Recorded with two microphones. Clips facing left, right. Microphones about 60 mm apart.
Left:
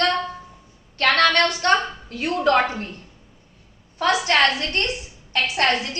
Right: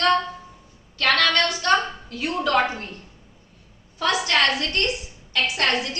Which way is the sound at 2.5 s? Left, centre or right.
Left.